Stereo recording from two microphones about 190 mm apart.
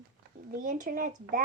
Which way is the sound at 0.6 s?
45° right (ahead or behind).